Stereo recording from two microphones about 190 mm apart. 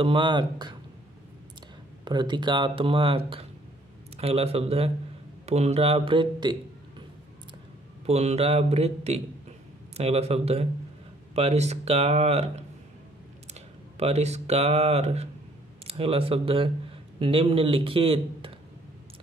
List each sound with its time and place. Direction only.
0.0 s speech: 25° right (ahead or behind)
2.0 s speech: 25° right (ahead or behind)
8.1 s speech: 35° right (ahead or behind)
13.9 s speech: 35° right (ahead or behind)